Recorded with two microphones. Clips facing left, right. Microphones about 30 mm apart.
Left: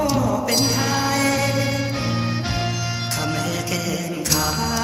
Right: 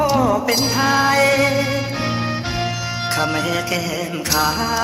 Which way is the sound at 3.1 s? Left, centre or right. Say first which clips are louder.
Right 6 dB; right.